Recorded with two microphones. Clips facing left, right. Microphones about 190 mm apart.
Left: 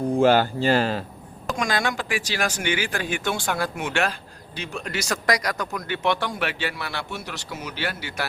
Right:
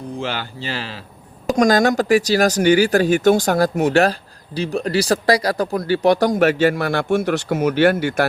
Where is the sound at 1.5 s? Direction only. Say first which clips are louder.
Right 11 dB; 40° right (ahead or behind).